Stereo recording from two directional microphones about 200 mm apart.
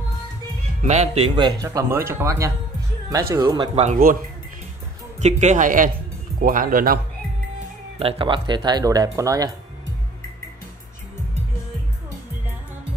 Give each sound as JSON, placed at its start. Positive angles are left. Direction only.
{"t": 0.8, "sound": "speech", "side_deg": -35}
{"t": 5.2, "sound": "speech", "side_deg": -35}
{"t": 8.0, "sound": "speech", "side_deg": -25}